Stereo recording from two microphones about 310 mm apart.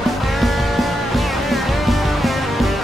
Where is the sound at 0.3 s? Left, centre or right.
Centre.